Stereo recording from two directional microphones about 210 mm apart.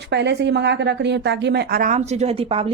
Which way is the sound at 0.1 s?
55° right (ahead or behind).